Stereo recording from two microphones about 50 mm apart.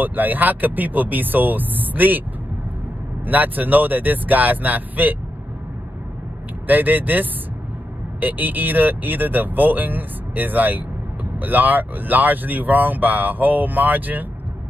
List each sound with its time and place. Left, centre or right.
0.0 s speech: right
3.3 s speech: right
6.7 s speech: right